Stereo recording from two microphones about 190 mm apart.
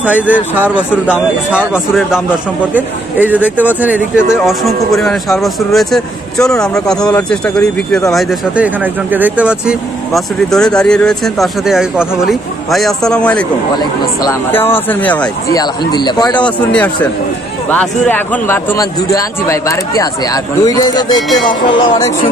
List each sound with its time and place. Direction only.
0.0 s a man's voice: 10° right (ahead or behind); by 15.2 s 10° left (ahead or behind)
15.9 s a man's voice: 20° left (ahead or behind)
16.4 s a man's voice: 5° left (ahead or behind); by 22.1 s 20° left (ahead or behind)